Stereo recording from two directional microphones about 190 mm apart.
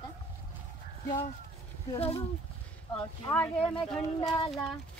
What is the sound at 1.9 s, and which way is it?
Speech, 30° left (ahead or behind).